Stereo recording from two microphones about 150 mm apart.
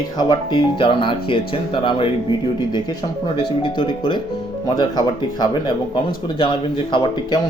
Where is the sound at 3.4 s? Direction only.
35° left (ahead or behind).